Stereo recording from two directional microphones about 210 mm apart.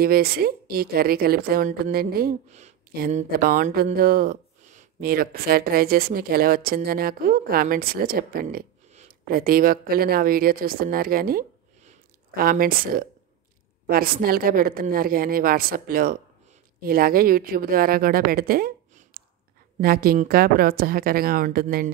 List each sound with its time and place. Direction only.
0.0 s a woman's voice: 45° right (ahead or behind)